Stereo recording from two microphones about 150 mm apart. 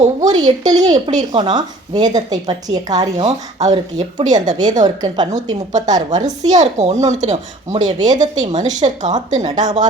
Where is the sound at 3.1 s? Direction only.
50° right (ahead or behind).